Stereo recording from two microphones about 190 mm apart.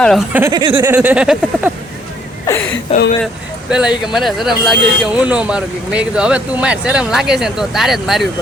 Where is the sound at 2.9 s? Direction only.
30° left (ahead or behind).